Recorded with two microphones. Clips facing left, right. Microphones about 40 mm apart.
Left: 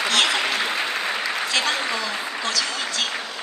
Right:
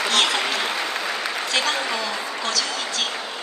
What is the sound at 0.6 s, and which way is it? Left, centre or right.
Applause, left.